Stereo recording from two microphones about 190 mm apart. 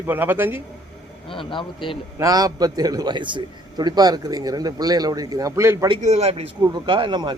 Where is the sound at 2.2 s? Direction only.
20° right (ahead or behind).